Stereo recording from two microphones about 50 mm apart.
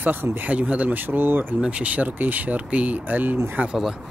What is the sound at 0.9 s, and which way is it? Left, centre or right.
Speech, right.